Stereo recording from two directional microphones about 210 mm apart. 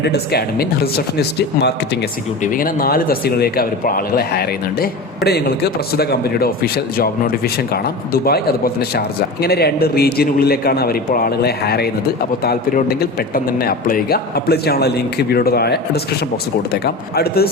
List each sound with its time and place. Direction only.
0.0 s a man's voice: 50° left (ahead or behind)
2.4 s a man's voice: 40° left (ahead or behind)